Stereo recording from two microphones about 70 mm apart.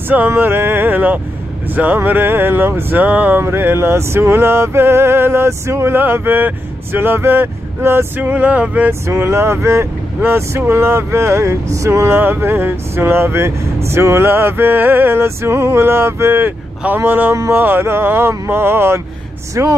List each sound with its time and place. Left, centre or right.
0.3 s speech: right
8.2 s speech: right
9.0 s speech: right
12.2 s speech: right